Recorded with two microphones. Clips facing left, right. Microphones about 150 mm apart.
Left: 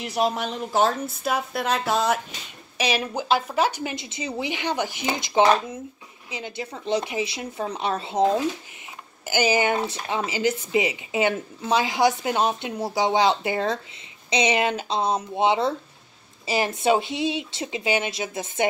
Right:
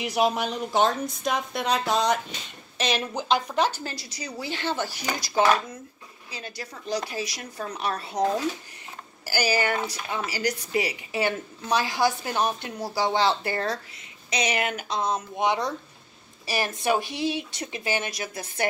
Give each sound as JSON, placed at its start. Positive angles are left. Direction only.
{"t": 0.0, "sound": "a woman's voice", "side_deg": 0}